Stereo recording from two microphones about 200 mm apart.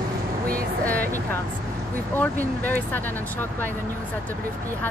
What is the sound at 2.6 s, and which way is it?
Speech, 10° left (ahead or behind).